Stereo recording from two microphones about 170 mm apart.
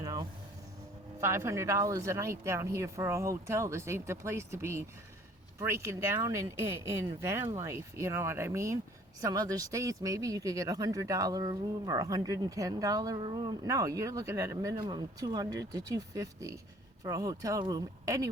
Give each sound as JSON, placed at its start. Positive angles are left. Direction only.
{"t": 0.0, "sound": "vehicle", "side_deg": -20}
{"t": 1.2, "sound": "speech", "side_deg": -15}